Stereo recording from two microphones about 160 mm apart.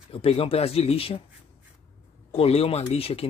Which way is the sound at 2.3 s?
40° left (ahead or behind).